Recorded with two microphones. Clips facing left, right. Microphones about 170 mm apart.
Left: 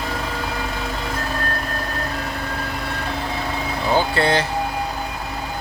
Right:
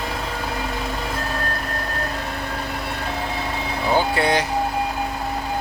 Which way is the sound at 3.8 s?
10° right (ahead or behind).